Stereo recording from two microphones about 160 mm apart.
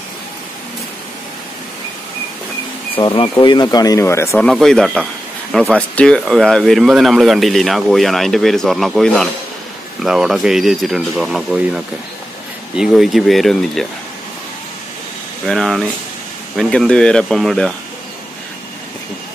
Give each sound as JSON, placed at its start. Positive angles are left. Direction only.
{"t": 3.0, "sound": "speech", "side_deg": 30}
{"t": 4.5, "sound": "speech", "side_deg": 0}
{"t": 15.4, "sound": "speech", "side_deg": 0}